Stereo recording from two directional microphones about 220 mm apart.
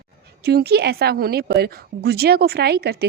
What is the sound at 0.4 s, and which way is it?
A woman's voice, 45° right (ahead or behind).